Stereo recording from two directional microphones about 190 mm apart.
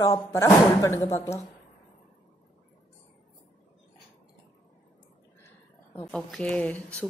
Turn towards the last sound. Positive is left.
turn(degrees=5)  # may be behind; listen again after turning